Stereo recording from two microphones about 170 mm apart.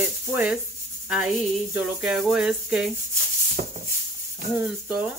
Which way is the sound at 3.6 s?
50° right (ahead or behind).